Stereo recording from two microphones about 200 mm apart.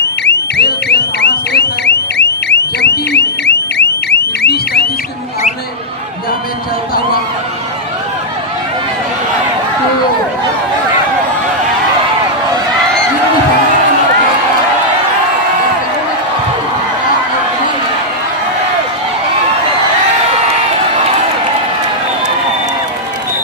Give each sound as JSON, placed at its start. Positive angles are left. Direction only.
{"t": 0.0, "sound": "alarm", "side_deg": 55}